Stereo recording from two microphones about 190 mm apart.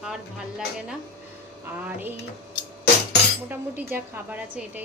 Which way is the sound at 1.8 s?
10° right (ahead or behind).